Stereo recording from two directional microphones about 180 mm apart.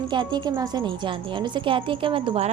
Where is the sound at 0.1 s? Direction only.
25° right (ahead or behind).